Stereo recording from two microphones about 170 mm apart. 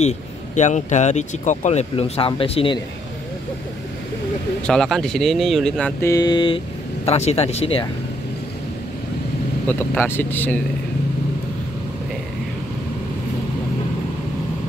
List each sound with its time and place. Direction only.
0.6 s speech: 45° left (ahead or behind)
4.6 s speech: 5° left (ahead or behind); by 7.9 s 35° left (ahead or behind)
9.7 s speech: 10° left (ahead or behind)